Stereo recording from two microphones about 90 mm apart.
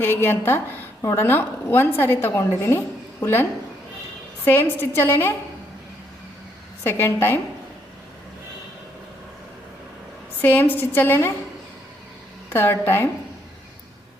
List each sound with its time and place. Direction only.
0.0 s a woman's voice: 25° left (ahead or behind)
4.4 s a woman's voice: 25° left (ahead or behind)
6.8 s a woman's voice: 25° left (ahead or behind)
10.4 s a woman's voice: 20° left (ahead or behind)
12.5 s a woman's voice: 25° left (ahead or behind)